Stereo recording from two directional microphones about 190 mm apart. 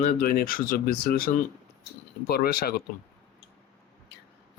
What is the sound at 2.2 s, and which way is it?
Speech, 55° left (ahead or behind).